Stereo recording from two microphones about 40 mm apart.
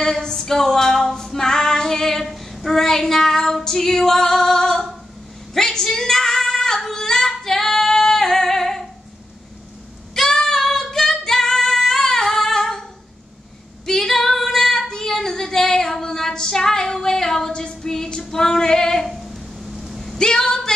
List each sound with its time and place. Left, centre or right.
0.0 s female singing: centre
2.2 s child singing: centre
5.5 s female singing: centre
10.1 s singing: centre
13.8 s female singing: centre
17.5 s female singing: left
17.8 s female singing: centre
19.2 s a sound: centre
20.2 s female singing: centre